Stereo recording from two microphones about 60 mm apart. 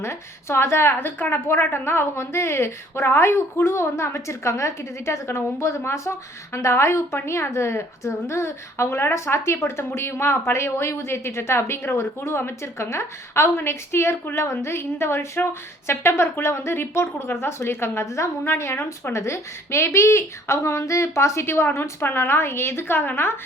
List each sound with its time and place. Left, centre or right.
0.0 s a woman's voice: left